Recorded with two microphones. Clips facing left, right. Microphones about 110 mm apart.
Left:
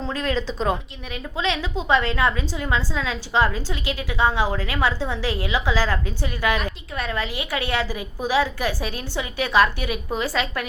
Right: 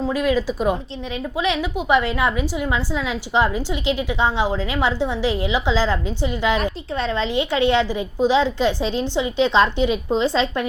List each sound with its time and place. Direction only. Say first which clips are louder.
0.0 s a woman's voice: right 5 dB; 10° right (ahead or behind); by 10.7 s 25° right (ahead or behind)